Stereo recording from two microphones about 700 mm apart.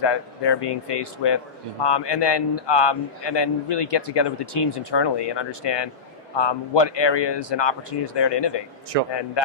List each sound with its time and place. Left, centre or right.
0.0 s a man's voice: left
8.9 s speech: right